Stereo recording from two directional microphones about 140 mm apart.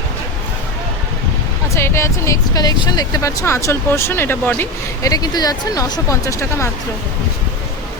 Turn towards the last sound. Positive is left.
turn(degrees=20)  # may be behind; listen again after turning